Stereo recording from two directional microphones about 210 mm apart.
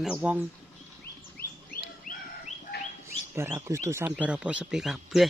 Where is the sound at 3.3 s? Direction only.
10° right (ahead or behind).